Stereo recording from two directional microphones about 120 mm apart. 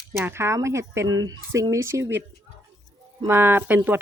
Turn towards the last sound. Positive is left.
turn(degrees=-15)  # may be behind; listen again after turning